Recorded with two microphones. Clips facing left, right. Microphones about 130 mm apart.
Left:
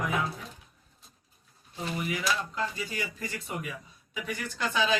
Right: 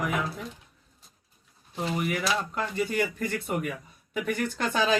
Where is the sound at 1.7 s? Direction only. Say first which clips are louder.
Right 4 dB; 60° right (ahead or behind).